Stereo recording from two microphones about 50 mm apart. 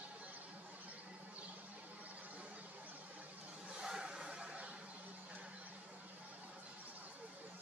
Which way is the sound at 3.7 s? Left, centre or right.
Centre.